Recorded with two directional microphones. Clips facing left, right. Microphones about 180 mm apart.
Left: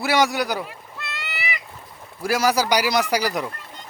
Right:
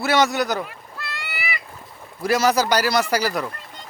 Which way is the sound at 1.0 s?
20° left (ahead or behind).